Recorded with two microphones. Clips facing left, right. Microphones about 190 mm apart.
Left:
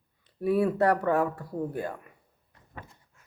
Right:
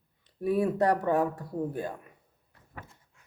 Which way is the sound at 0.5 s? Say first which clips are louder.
Left 2 dB; 15° right (ahead or behind).